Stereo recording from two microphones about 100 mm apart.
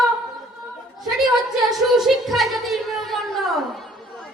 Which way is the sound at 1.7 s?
Centre (ahead or behind).